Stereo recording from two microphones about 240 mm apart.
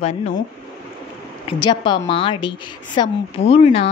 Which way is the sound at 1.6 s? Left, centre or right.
Centre.